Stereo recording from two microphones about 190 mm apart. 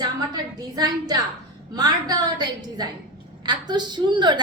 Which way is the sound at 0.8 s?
20° right (ahead or behind).